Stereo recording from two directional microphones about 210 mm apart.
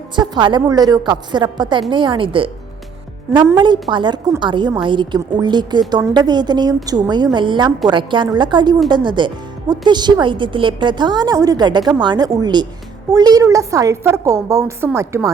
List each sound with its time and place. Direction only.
0.2 s speech: 20° right (ahead or behind)
3.6 s a woman's voice: 20° right (ahead or behind)